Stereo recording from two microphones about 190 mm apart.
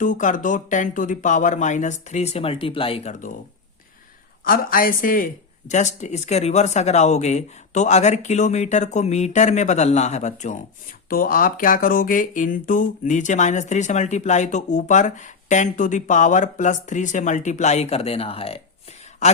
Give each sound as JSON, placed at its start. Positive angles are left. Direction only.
{"t": 0.0, "sound": "speech", "side_deg": 40}
{"t": 4.4, "sound": "speech", "side_deg": 50}
{"t": 11.1, "sound": "speech", "side_deg": 50}